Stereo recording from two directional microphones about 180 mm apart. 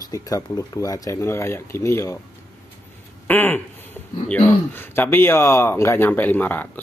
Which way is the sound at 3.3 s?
10° left (ahead or behind).